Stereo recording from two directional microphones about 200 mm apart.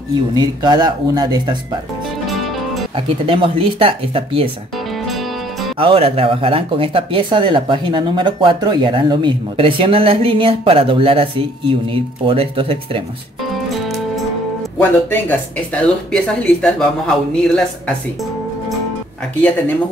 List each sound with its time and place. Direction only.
0.1 s speech: 20° right (ahead or behind)
2.2 s music: centre (ahead or behind)
3.3 s speech: 25° right (ahead or behind)
5.0 s music: centre (ahead or behind)
5.8 s speech: 30° right (ahead or behind)
13.5 s music: centre (ahead or behind)
14.8 s speech: 10° left (ahead or behind)